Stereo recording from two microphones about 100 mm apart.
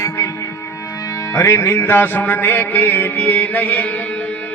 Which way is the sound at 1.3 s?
30° left (ahead or behind).